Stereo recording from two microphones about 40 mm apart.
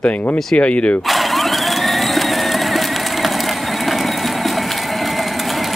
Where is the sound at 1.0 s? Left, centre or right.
Centre.